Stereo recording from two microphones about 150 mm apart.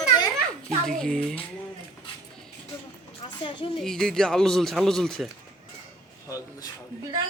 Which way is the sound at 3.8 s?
5° left (ahead or behind).